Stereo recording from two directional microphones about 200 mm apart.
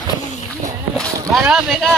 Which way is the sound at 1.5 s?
5° right (ahead or behind).